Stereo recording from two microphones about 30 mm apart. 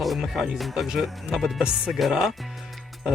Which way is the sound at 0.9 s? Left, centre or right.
Centre.